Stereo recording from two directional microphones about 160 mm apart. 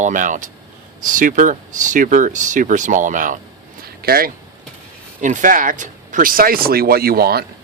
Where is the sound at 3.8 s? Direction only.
70° right (ahead or behind).